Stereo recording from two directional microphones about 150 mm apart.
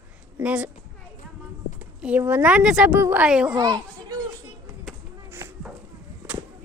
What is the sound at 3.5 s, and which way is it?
Children playing, 25° right (ahead or behind).